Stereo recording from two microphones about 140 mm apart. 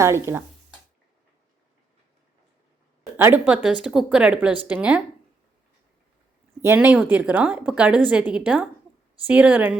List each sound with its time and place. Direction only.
0.0 s speech: 20° right (ahead or behind)
3.2 s speech: 15° right (ahead or behind)
6.6 s speech: 15° right (ahead or behind)